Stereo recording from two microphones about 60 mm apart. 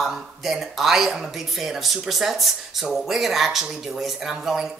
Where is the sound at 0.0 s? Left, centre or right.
Centre.